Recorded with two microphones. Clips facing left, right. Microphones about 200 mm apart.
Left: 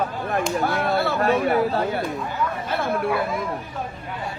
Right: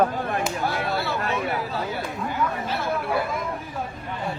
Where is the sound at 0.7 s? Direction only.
55° left (ahead or behind).